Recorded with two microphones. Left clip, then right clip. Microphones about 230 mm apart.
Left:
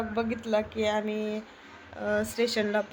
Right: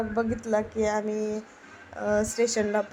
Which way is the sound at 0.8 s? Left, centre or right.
Right.